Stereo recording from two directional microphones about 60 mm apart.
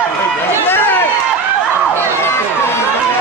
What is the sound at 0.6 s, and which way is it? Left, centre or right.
Run, left.